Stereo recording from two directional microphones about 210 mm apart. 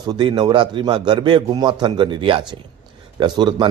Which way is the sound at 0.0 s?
20° right (ahead or behind).